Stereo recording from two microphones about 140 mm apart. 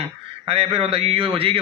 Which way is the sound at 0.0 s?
45° right (ahead or behind).